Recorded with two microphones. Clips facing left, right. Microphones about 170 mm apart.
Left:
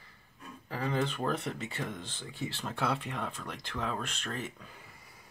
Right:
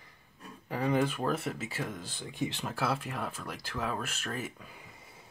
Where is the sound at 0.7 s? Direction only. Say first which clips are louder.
Right 4 dB; 15° right (ahead or behind).